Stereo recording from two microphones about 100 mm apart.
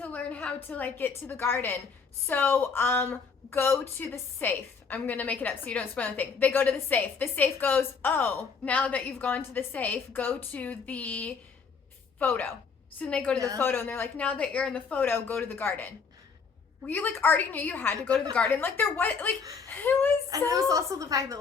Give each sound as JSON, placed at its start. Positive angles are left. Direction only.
{"t": 0.0, "sound": "a woman's voice", "side_deg": 15}
{"t": 13.6, "sound": "speech", "side_deg": 20}
{"t": 20.3, "sound": "a woman's voice", "side_deg": -35}